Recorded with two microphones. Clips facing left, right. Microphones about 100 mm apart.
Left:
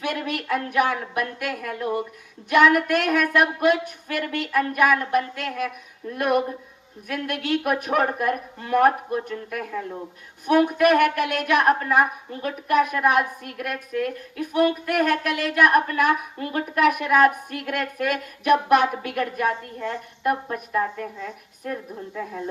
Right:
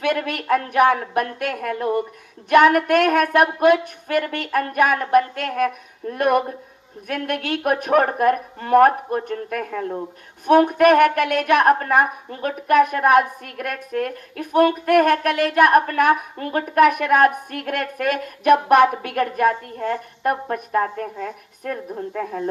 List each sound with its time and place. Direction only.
0.0 s a woman's voice: 55° right (ahead or behind)